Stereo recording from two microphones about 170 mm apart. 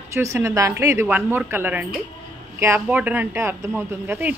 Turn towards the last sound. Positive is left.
turn(degrees=-15)  # may be behind; listen again after turning